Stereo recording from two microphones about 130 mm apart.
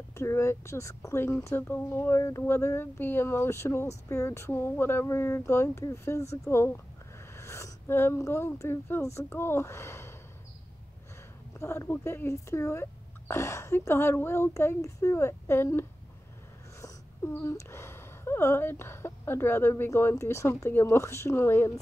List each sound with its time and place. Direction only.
0.1 s speech: 20° left (ahead or behind)
11.5 s speech: 20° left (ahead or behind)
16.8 s speech: 20° left (ahead or behind)